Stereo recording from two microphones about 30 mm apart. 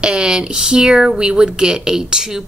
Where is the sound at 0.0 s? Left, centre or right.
Right.